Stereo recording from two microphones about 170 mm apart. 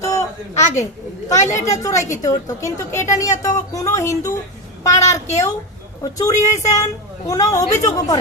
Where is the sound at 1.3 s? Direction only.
15° left (ahead or behind).